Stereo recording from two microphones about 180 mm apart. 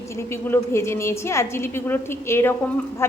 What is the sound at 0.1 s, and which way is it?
A woman's voice, 15° left (ahead or behind).